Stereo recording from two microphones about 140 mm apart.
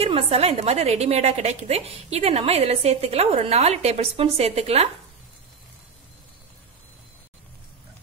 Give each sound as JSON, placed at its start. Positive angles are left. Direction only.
{"t": 0.0, "sound": "a woman's voice", "side_deg": -45}